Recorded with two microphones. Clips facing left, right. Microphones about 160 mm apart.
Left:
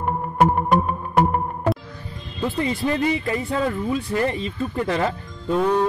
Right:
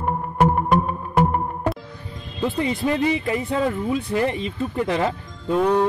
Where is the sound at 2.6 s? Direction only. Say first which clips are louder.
Even; 20° right (ahead or behind).